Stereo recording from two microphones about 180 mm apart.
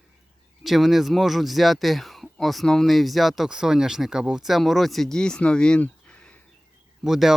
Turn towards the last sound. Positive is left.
turn(degrees=0)  # may be behind; listen again after turning